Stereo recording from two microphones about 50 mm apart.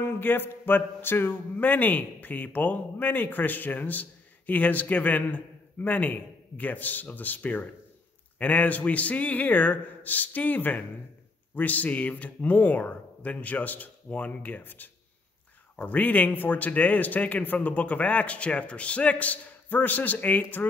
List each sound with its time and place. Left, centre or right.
0.0 s speech: left